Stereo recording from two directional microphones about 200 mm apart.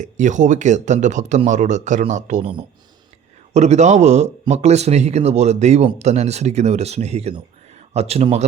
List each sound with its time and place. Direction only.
0.0 s a man's voice: 40° right (ahead or behind)
3.5 s a man's voice: 35° right (ahead or behind)